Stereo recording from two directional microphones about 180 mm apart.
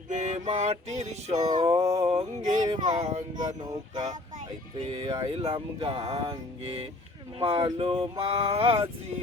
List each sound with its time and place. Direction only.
0.1 s speech: 40° right (ahead or behind)
3.6 s speech: 25° right (ahead or behind)